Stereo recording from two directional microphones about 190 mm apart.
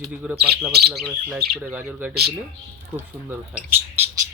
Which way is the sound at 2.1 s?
60° right (ahead or behind).